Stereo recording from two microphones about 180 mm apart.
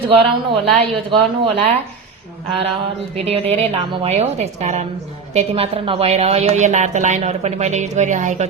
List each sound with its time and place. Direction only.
0.1 s a woman's voice: 30° right (ahead or behind)
3.2 s a woman's voice: 35° right (ahead or behind)